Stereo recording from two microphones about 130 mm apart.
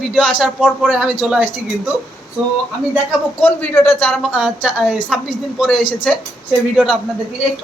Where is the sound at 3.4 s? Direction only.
15° left (ahead or behind).